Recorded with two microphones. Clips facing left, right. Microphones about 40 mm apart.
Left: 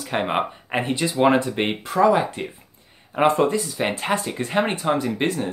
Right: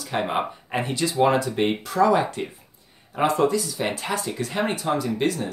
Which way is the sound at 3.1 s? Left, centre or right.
Left.